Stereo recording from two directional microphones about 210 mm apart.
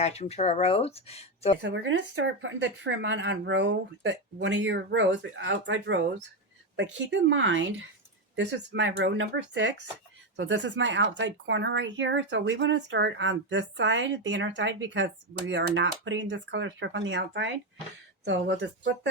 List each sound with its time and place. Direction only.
0.0 s speech: 30° left (ahead or behind)
1.6 s speech: 60° right (ahead or behind)